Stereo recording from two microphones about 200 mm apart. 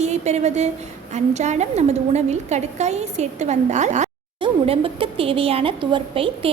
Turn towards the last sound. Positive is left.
turn(degrees=-25)  # may be behind; listen again after turning